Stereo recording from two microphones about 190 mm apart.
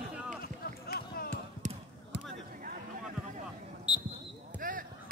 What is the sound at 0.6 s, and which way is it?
Run, 55° left (ahead or behind).